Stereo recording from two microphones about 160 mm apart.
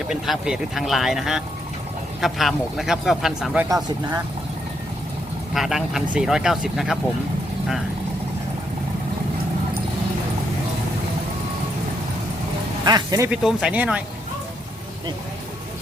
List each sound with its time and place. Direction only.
0.1 s speech: 5° right (ahead or behind)
5.5 s speech: centre (ahead or behind)
12.8 s speech: 25° right (ahead or behind)
13.3 s speech: 5° right (ahead or behind)